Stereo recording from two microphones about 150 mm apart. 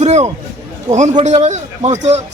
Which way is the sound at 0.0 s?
45° right (ahead or behind).